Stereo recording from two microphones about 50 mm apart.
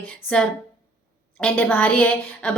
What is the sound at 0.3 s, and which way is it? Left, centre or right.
Speech, left.